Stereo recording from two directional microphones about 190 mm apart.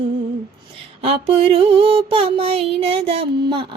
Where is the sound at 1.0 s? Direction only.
30° right (ahead or behind).